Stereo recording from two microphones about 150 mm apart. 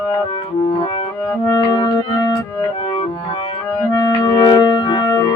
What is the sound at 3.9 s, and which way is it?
Organ, 30° left (ahead or behind).